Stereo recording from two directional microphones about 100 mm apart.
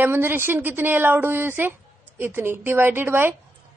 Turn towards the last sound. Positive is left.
turn(degrees=-20)  # may be behind; listen again after turning